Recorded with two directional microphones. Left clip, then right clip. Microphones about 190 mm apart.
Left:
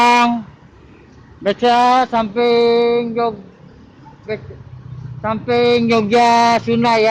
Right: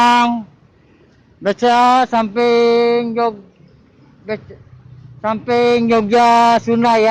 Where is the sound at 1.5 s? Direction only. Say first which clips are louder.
Right 1 dB; 35° right (ahead or behind).